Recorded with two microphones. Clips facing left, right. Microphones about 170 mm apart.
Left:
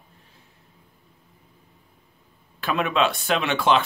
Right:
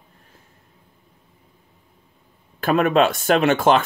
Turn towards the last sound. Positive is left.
turn(degrees=-45)  # may be behind; listen again after turning